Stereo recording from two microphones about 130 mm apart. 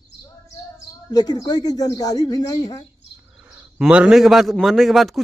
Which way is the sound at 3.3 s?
15° right (ahead or behind).